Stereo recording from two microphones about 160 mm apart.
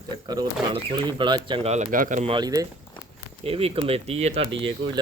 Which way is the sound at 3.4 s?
40° right (ahead or behind).